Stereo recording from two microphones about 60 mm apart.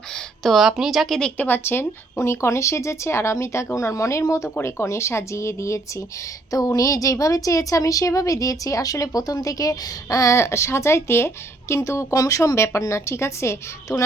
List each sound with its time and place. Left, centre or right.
0.1 s a sound: centre
0.5 s speech: centre
1.4 s speech: left
2.1 s speech: left
4.6 s speech: left
6.5 s speech: left
10.3 s speech: left